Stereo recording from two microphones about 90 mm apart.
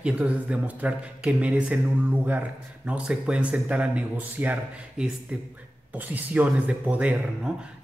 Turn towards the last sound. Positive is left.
turn(degrees=-15)  # may be behind; listen again after turning